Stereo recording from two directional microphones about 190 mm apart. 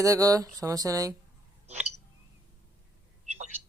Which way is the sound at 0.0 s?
15° right (ahead or behind).